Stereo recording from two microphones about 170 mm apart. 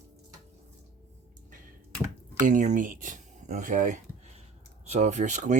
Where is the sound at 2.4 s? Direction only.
50° right (ahead or behind).